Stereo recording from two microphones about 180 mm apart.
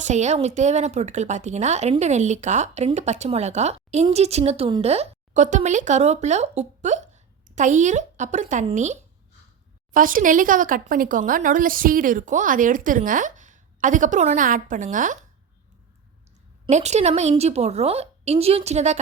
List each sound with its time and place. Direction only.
0.0 s a woman's voice: 40° right (ahead or behind)
16.6 s a woman's voice: 40° right (ahead or behind)